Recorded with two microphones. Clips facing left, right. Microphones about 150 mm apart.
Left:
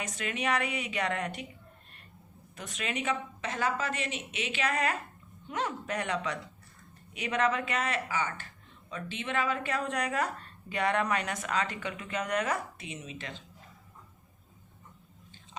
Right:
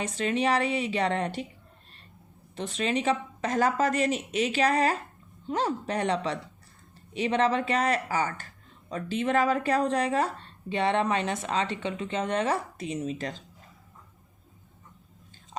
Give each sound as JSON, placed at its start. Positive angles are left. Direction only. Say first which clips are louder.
{"t": 0.0, "sound": "a woman's voice", "louder": "right 7 dB", "side_deg": -30}
{"t": 2.6, "sound": "a woman's voice", "louder": "right 8 dB", "side_deg": -30}